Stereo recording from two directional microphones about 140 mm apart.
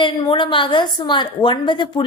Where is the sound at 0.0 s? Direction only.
35° left (ahead or behind).